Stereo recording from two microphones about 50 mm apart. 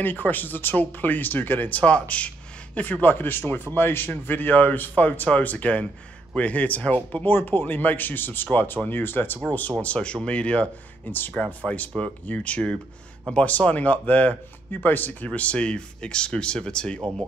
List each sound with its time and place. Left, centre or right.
0.0 s speech: left
7.2 s speech: left
9.5 s speech: left
11.1 s speech: left
11.6 s speech: left
15.2 s speech: left